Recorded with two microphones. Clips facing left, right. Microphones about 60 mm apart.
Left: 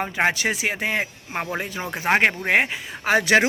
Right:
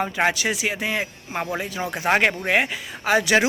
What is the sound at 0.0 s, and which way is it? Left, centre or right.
Speech, left.